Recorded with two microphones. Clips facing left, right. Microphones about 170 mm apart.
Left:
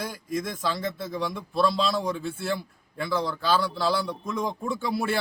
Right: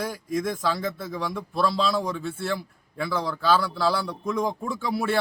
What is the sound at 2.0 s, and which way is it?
Speech, 25° left (ahead or behind).